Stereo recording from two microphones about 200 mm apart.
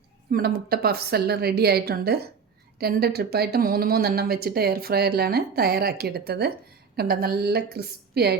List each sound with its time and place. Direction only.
0.3 s speech: 50° right (ahead or behind)